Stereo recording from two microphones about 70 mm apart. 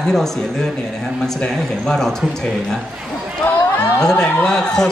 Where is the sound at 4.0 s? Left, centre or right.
Centre.